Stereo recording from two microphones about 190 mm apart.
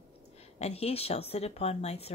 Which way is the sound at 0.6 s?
30° left (ahead or behind).